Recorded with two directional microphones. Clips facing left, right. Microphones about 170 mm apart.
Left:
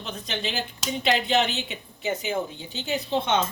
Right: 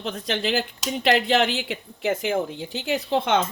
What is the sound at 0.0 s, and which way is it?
A woman's voice, 90° right.